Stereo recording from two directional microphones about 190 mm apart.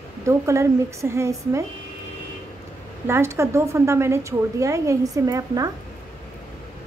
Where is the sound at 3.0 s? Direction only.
15° right (ahead or behind).